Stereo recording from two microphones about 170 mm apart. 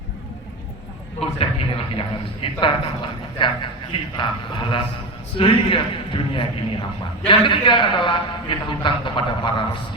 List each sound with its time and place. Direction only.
1.2 s a man's voice: 35° left (ahead or behind)